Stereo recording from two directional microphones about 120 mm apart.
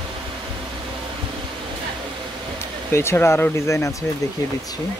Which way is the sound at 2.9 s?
20° left (ahead or behind).